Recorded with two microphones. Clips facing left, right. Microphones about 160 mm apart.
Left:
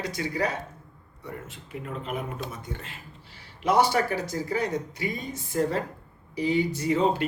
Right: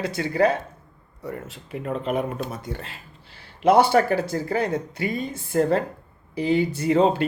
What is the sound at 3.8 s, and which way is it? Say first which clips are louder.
Speech: right 5 dB; 60° right (ahead or behind).